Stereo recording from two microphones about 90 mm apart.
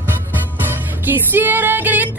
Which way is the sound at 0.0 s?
20° right (ahead or behind).